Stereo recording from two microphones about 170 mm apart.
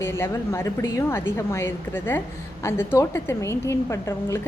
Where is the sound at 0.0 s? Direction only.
15° left (ahead or behind).